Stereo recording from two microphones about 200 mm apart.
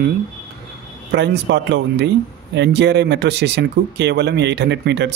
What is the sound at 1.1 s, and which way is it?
A man's voice, 60° right (ahead or behind).